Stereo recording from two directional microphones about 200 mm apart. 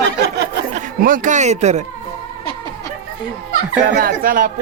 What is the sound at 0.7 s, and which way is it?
Speech, 40° right (ahead or behind).